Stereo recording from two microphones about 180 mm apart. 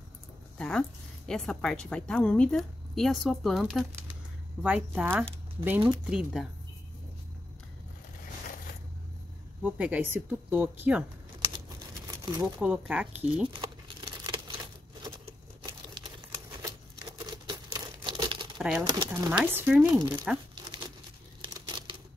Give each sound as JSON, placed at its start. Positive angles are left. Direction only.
{"t": 0.6, "sound": "a woman's voice", "side_deg": 5}
{"t": 9.6, "sound": "speech", "side_deg": -10}
{"t": 12.3, "sound": "speech", "side_deg": -20}
{"t": 12.6, "sound": "speech", "side_deg": -5}
{"t": 13.5, "sound": "crumpling", "side_deg": -25}
{"t": 17.2, "sound": "crumpling", "side_deg": -25}
{"t": 18.6, "sound": "speech", "side_deg": 0}
{"t": 18.9, "sound": "speech", "side_deg": -20}
{"t": 20.3, "sound": "a woman's voice", "side_deg": -5}
{"t": 21.4, "sound": "crumpling", "side_deg": -20}